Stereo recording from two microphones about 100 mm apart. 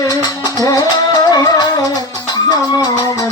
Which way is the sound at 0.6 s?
40° left (ahead or behind).